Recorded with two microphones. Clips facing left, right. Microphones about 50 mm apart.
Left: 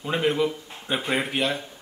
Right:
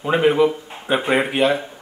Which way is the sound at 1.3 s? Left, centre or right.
Centre.